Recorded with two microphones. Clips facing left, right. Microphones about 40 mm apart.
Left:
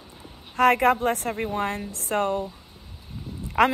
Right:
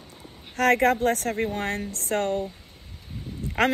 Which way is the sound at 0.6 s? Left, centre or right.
Left.